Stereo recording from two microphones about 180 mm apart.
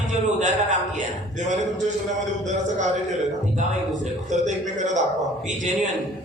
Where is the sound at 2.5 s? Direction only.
40° right (ahead or behind).